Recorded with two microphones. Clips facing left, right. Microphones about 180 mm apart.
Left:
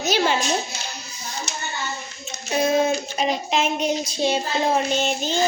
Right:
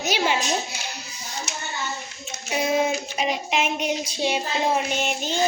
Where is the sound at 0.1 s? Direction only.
10° right (ahead or behind).